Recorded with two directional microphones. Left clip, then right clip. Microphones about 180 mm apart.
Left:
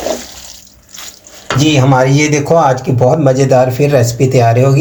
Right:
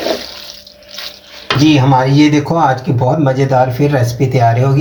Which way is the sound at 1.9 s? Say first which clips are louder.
Even; 40° left (ahead or behind).